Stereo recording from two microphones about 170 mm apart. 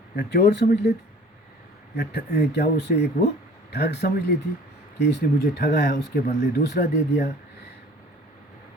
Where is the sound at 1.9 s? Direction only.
70° left (ahead or behind).